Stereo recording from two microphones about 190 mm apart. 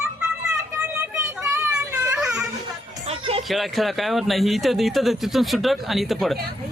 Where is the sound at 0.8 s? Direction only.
10° right (ahead or behind).